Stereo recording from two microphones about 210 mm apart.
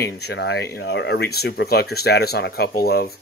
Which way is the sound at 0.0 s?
50° left (ahead or behind).